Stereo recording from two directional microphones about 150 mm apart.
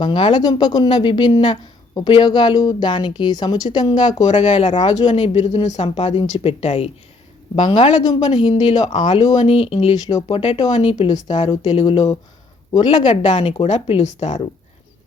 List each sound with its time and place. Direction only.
0.0 s a woman's voice: 30° left (ahead or behind)
4.3 s a woman's voice: 50° left (ahead or behind)
10.1 s a woman's voice: 25° left (ahead or behind)
10.3 s speech: 40° left (ahead or behind)
11.1 s a woman's voice: 25° left (ahead or behind)
11.6 s a woman's voice: 45° left (ahead or behind)
12.7 s a woman's voice: 30° left (ahead or behind)
13.1 s a woman's voice: 45° left (ahead or behind)